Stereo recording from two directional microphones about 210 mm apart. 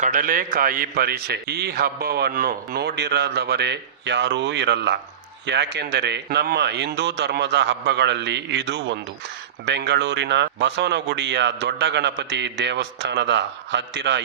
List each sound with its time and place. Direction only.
0.0 s a man's voice: 40° right (ahead or behind); by 14.2 s 55° right (ahead or behind)